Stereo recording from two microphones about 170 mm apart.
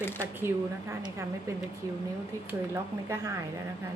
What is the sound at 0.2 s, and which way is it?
Speech, 15° right (ahead or behind).